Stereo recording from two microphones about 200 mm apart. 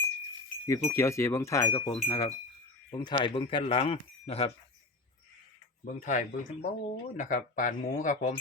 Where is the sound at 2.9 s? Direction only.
20° left (ahead or behind).